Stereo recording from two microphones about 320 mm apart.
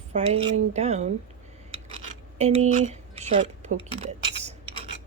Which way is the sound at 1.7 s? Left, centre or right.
Centre.